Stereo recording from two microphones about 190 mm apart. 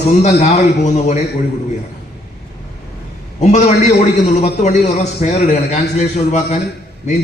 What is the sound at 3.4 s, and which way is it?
A man's voice, 35° left (ahead or behind).